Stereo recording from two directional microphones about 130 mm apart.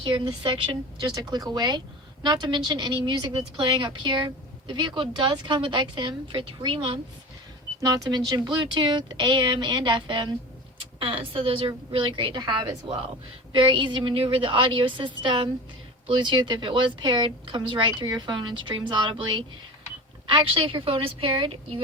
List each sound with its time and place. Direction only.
0.0 s a woman's voice: 35° right (ahead or behind)
7.8 s a woman's voice: 30° right (ahead or behind)